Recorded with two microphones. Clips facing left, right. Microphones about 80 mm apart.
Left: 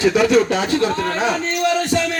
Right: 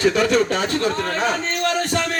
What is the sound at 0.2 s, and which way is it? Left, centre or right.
Speech, right.